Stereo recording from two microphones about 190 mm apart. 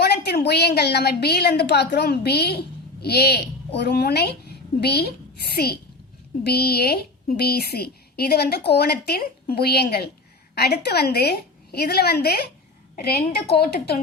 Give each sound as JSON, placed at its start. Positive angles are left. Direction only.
{"t": 0.0, "sound": "a woman's voice", "side_deg": 55}